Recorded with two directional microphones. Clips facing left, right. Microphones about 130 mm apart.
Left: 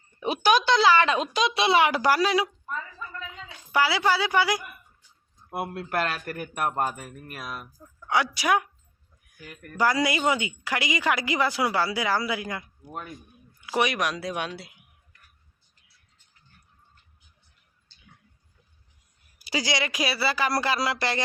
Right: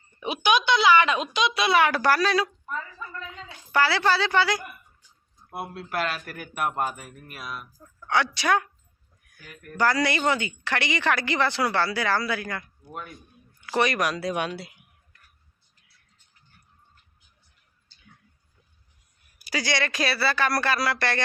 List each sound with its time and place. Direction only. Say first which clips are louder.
0.2 s a woman's voice: left 1 dB; 35° left (ahead or behind); by 2.5 s 15° left (ahead or behind)
3.7 s a woman's voice: right 1 dB; 10° left (ahead or behind)
5.5 s a man's voice: left 2 dB; 50° left (ahead or behind)
7.9 s a woman's voice: even; 10° left (ahead or behind)
9.7 s a woman's voice: even; 15° left (ahead or behind)
13.7 s speech: right 1 dB; 5° left (ahead or behind)
19.5 s speech: even; 20° left (ahead or behind)